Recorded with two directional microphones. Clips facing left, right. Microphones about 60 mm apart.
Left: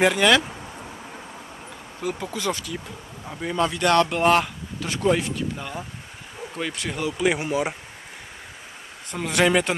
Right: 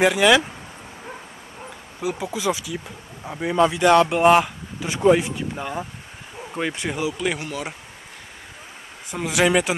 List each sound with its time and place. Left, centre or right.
0.0 s speech: centre
2.0 s speech: centre
7.2 s speech: centre
9.1 s speech: centre